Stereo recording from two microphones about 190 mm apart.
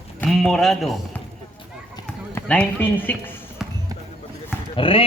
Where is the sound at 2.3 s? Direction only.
5° left (ahead or behind).